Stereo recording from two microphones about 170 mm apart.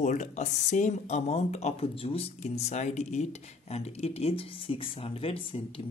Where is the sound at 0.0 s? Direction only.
45° left (ahead or behind).